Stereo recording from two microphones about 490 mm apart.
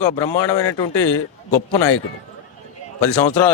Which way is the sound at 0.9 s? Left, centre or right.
Left.